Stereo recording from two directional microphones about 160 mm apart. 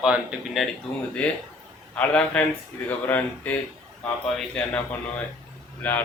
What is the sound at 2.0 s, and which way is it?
Speech, 5° left (ahead or behind).